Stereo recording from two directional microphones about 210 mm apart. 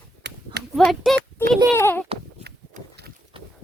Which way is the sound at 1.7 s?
10° left (ahead or behind).